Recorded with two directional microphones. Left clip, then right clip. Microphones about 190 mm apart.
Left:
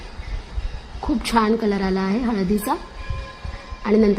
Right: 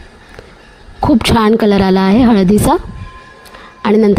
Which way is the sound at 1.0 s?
45° right (ahead or behind).